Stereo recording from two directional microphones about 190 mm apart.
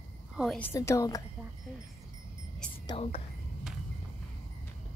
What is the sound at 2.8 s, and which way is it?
Speech, 30° left (ahead or behind).